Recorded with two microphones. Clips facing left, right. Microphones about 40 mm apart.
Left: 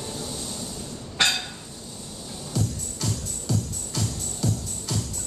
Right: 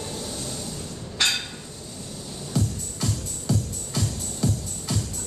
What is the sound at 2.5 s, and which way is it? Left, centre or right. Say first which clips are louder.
Music: right 2 dB; centre.